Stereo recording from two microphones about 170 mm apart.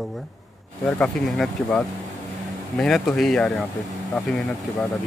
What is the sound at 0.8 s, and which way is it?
Speech, 5° left (ahead or behind).